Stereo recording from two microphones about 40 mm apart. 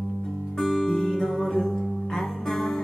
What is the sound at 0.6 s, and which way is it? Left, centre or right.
Music, centre.